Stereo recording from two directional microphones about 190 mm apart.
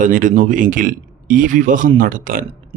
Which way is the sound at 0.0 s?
45° right (ahead or behind).